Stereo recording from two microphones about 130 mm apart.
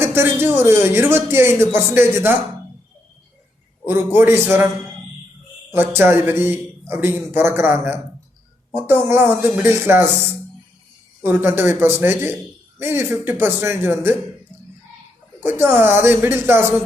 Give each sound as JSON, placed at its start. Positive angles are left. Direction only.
{"t": 0.0, "sound": "speech", "side_deg": -20}
{"t": 3.8, "sound": "a man's voice", "side_deg": -15}
{"t": 5.7, "sound": "a man's voice", "side_deg": -15}
{"t": 11.2, "sound": "a man's voice", "side_deg": -15}
{"t": 15.4, "sound": "a man's voice", "side_deg": -15}